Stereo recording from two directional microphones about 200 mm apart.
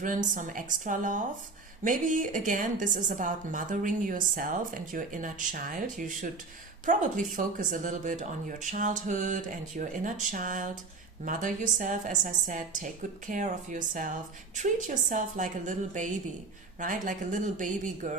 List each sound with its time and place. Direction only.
0.0 s a woman's voice: 40° right (ahead or behind)